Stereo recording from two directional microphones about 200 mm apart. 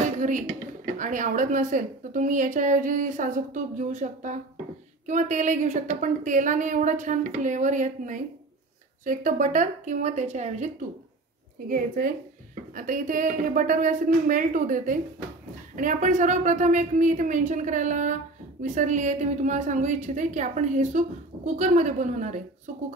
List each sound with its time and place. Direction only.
0.9 s a woman's voice: 40° right (ahead or behind)
12.7 s a woman's voice: 40° right (ahead or behind)